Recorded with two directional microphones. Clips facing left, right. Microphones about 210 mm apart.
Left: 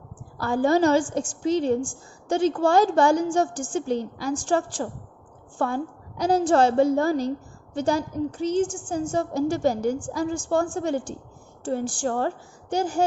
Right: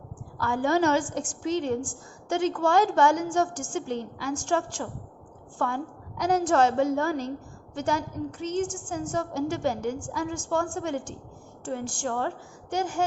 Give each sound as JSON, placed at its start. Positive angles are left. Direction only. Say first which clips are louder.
{"t": 0.3, "sound": "a woman's voice", "louder": "left 4 dB", "side_deg": 35}